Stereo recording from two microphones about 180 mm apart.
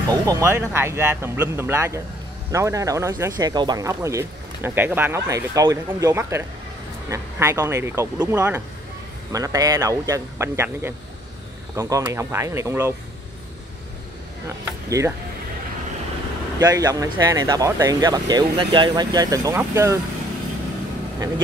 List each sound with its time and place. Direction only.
0.1 s speech: 20° right (ahead or behind)
14.9 s speech: 15° right (ahead or behind)
16.5 s speech: 20° right (ahead or behind)